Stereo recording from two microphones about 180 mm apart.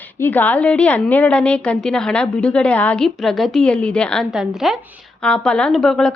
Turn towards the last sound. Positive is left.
turn(degrees=0)  # may be behind; listen again after turning